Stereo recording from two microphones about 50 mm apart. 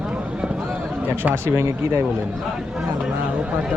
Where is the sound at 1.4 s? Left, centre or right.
Right.